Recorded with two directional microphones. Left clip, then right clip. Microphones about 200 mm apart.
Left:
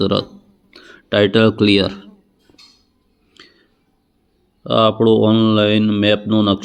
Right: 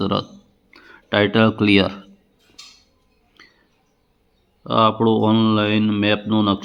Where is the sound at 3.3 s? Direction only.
15° left (ahead or behind).